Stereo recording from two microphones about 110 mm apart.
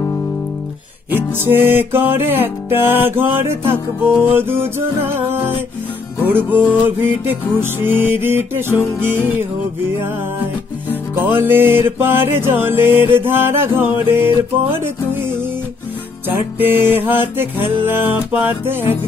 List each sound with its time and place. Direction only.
1.1 s music: 20° right (ahead or behind)
6.2 s music: 20° right (ahead or behind)
11.1 s music: 20° right (ahead or behind)
16.3 s music: 20° right (ahead or behind)